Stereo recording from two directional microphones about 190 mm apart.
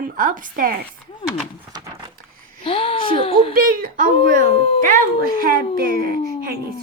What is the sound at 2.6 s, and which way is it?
Speech, 30° left (ahead or behind).